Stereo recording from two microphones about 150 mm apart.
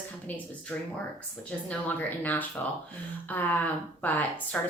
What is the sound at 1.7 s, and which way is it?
Speech, 10° left (ahead or behind).